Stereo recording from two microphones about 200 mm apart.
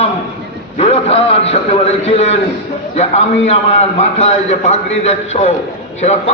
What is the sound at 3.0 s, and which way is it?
A man's voice, 35° left (ahead or behind).